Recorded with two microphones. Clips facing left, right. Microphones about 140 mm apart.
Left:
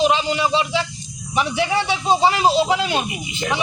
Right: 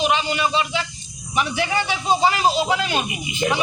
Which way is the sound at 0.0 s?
25° left (ahead or behind).